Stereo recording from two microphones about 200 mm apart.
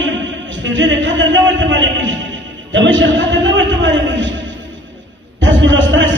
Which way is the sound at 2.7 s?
65° right (ahead or behind).